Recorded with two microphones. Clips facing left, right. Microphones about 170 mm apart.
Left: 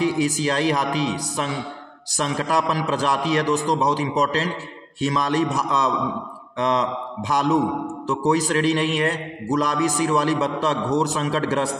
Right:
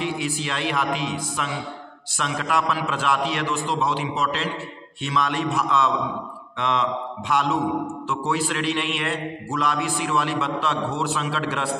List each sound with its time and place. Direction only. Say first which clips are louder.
0.0 s a man's voice: left 6 dB; 40° left (ahead or behind)